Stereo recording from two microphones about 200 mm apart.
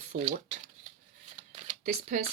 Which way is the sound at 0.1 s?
35° right (ahead or behind).